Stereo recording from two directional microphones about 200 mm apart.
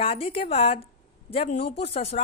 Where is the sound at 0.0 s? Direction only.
25° left (ahead or behind).